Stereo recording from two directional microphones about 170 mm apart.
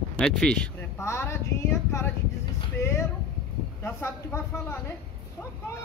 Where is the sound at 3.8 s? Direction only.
15° left (ahead or behind).